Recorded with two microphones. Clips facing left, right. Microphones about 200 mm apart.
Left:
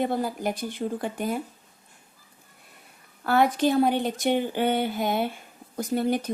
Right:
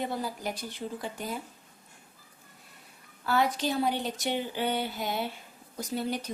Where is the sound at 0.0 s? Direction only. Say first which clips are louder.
Left 7 dB; 55° left (ahead or behind).